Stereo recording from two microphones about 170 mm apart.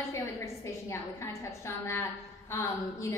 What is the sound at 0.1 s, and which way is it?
A woman's voice, 15° left (ahead or behind).